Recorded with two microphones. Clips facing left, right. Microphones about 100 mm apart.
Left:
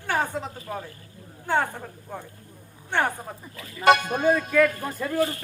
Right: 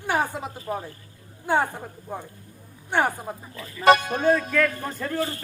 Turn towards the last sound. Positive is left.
turn(degrees=5)  # may be behind; listen again after turning